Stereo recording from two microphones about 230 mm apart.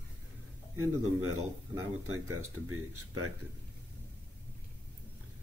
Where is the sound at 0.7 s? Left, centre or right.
Right.